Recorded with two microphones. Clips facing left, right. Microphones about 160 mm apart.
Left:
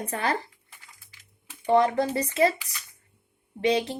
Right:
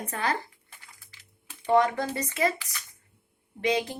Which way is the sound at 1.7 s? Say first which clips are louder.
Left 2 dB; 30° left (ahead or behind).